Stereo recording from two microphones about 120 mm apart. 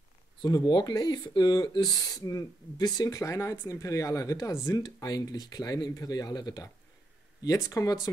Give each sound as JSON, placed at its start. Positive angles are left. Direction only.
{"t": 0.4, "sound": "speech", "side_deg": 35}